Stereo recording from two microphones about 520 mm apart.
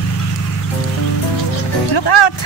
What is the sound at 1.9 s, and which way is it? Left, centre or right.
Music, left.